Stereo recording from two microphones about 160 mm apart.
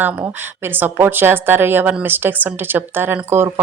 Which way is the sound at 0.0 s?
10° right (ahead or behind).